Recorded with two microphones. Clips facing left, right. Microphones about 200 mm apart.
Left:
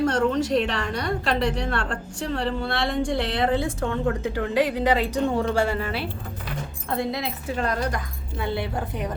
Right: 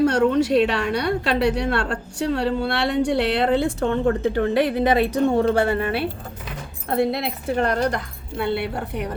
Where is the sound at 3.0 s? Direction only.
70° right (ahead or behind).